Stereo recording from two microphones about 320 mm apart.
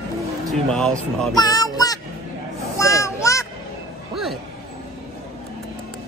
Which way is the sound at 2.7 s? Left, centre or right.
Centre.